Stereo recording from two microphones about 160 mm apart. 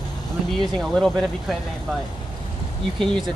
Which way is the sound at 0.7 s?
5° left (ahead or behind).